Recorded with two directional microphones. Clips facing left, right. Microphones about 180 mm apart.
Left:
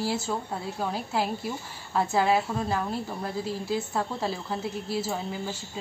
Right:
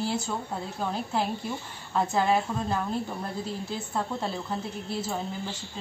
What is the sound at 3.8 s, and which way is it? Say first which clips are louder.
A woman's voice: left 1 dB; 5° left (ahead or behind).